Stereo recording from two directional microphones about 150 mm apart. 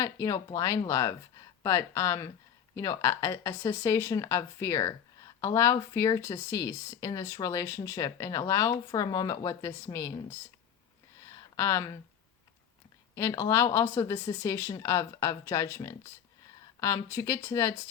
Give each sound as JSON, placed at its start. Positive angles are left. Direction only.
{"t": 0.0, "sound": "speech", "side_deg": 20}
{"t": 11.3, "sound": "a sound", "side_deg": 20}
{"t": 13.1, "sound": "speech", "side_deg": 20}